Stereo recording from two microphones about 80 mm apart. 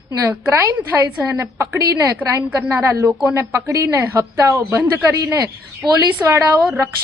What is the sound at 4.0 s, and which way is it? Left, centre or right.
Speech, right.